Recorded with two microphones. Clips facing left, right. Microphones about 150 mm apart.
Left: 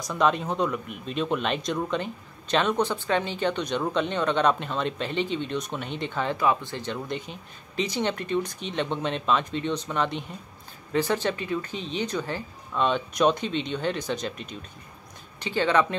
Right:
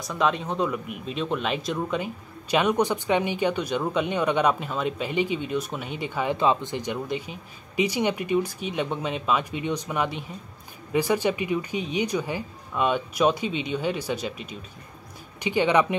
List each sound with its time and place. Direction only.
0.0 s speech: centre (ahead or behind)
6.3 s speech: 20° right (ahead or behind); by 14.6 s 5° right (ahead or behind)
15.4 s speech: 15° right (ahead or behind)